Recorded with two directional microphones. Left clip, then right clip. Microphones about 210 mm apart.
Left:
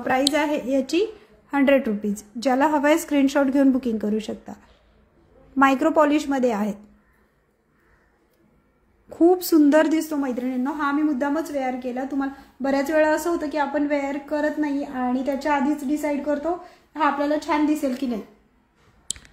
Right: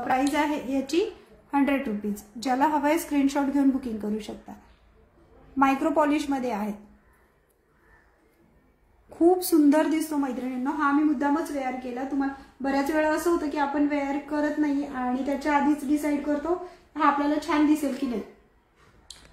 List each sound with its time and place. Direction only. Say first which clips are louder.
0.0 s a woman's voice: left 3 dB; 35° left (ahead or behind)
5.6 s a woman's voice: left 5 dB; 35° left (ahead or behind)
9.1 s a woman's voice: left 3 dB; 30° left (ahead or behind)